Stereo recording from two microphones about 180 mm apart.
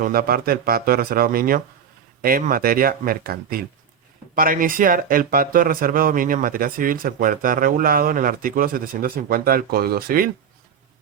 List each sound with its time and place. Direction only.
0.0 s speech: 55° right (ahead or behind)